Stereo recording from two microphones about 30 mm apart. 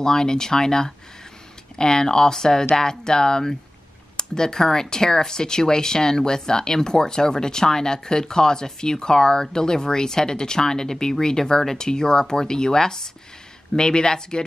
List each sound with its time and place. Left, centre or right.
0.0 s speech: left